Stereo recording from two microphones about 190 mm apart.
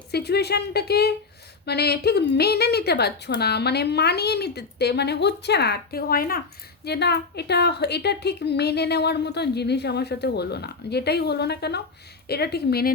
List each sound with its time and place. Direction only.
0.1 s a woman's voice: 60° left (ahead or behind)